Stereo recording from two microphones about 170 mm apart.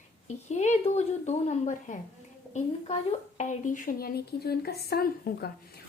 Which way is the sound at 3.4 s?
50° left (ahead or behind).